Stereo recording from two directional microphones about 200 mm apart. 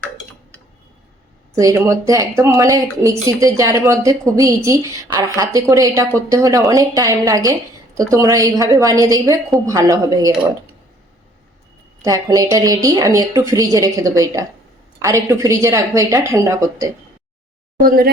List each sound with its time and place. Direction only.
1.5 s speech: 15° right (ahead or behind)
12.0 s speech: 15° right (ahead or behind)
17.7 s speech: 45° right (ahead or behind)